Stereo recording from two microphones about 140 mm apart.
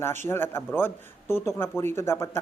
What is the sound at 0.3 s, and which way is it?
Speech, 15° left (ahead or behind).